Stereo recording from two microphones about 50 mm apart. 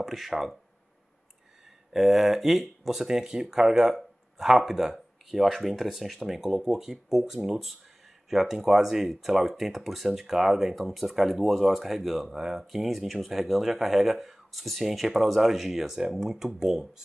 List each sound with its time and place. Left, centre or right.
0.0 s speech: centre
1.9 s speech: centre